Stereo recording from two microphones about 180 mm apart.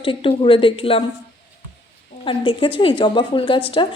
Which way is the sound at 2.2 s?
30° left (ahead or behind).